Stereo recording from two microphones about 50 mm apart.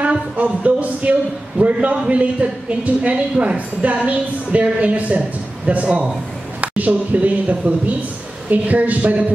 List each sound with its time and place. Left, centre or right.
0.0 s a woman's voice: right